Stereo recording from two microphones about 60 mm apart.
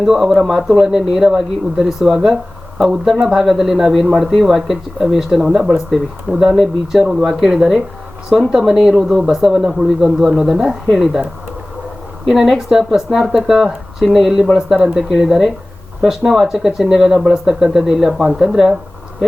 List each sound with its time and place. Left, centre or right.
0.0 s speech: centre
4.0 s speech: centre
4.3 s speech: centre
12.3 s speech: centre